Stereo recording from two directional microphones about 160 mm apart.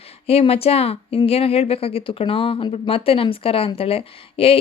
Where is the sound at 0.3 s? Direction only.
40° left (ahead or behind).